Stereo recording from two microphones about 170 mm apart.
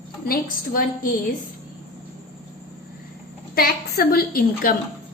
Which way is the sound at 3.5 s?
60° left (ahead or behind).